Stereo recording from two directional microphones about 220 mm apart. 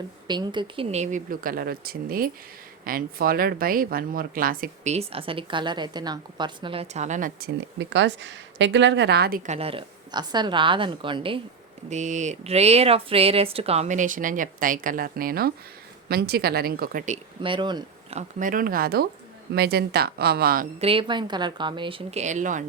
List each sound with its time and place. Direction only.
0.3 s speech: 20° right (ahead or behind); by 9.4 s 45° right (ahead or behind)
9.5 s a woman's voice: 25° right (ahead or behind)
11.9 s a woman's voice: 35° right (ahead or behind)
17.4 s speech: 20° right (ahead or behind)
18.2 s a woman's voice: 35° right (ahead or behind)
20.8 s a woman's voice: 25° right (ahead or behind)